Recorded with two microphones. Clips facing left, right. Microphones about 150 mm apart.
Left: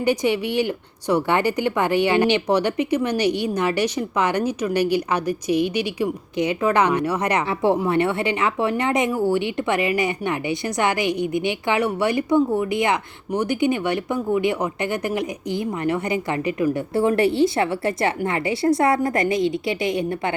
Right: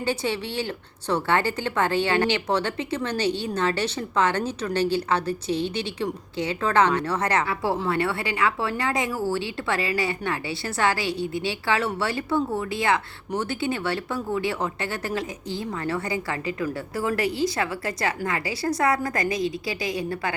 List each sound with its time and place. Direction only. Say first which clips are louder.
0.0 s a woman's voice: left 6 dB; 15° left (ahead or behind)